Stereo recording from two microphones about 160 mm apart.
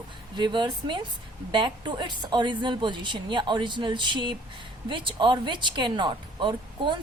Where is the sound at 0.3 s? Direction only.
30° right (ahead or behind).